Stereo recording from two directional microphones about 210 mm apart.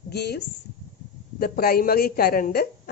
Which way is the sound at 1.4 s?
45° left (ahead or behind).